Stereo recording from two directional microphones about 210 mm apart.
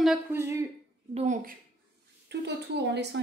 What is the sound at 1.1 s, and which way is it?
Speech, 30° right (ahead or behind).